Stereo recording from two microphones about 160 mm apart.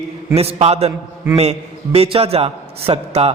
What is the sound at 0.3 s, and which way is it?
A man's voice, 40° right (ahead or behind).